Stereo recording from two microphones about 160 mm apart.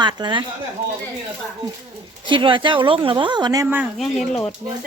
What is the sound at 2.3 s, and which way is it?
A woman's voice, 30° right (ahead or behind).